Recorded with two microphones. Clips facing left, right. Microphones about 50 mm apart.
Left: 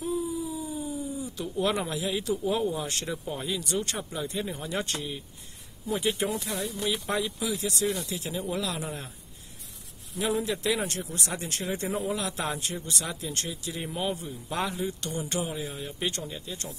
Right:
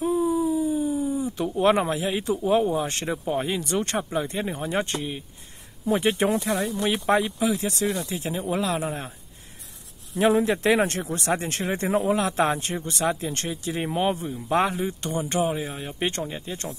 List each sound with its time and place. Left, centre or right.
0.0 s speech: right
10.1 s speech: right